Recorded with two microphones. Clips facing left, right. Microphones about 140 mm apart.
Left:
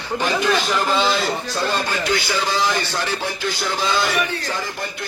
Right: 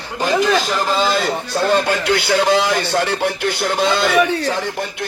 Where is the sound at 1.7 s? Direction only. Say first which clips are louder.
Right 7 dB; 65° right (ahead or behind).